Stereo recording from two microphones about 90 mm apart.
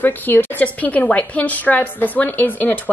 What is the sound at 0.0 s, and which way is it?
A woman's voice, 20° left (ahead or behind).